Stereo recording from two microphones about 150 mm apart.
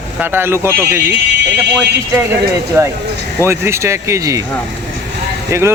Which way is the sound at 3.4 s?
15° right (ahead or behind).